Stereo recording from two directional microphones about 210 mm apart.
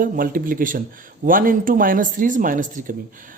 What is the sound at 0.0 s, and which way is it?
Speech, 40° right (ahead or behind).